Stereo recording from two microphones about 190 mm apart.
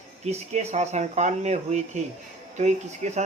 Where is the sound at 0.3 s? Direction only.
35° right (ahead or behind).